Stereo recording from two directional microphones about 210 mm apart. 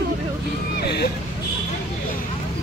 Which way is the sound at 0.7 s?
50° left (ahead or behind).